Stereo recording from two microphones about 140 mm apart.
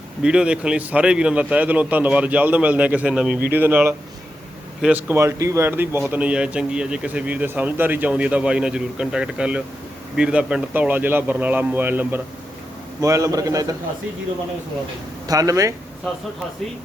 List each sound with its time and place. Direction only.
0.2 s a man's voice: 5° right (ahead or behind)
13.0 s a man's voice: 25° right (ahead or behind)
15.3 s a man's voice: 25° right (ahead or behind)